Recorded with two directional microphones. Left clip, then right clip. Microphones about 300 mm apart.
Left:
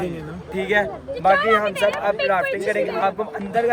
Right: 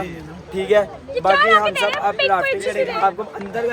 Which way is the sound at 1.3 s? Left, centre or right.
Right.